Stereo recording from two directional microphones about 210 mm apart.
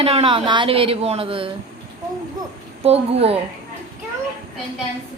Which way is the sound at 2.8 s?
30° right (ahead or behind).